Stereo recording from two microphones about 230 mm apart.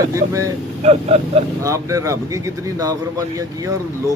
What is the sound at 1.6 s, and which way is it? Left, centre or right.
Speech, centre.